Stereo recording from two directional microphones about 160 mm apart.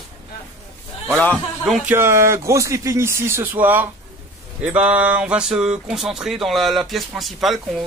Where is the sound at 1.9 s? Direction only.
15° right (ahead or behind).